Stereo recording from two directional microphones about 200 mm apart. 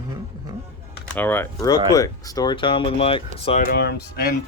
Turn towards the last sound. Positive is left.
turn(degrees=50)  # may be behind; listen again after turning